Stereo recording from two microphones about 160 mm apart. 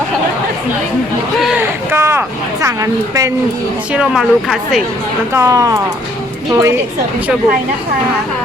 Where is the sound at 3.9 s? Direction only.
5° right (ahead or behind).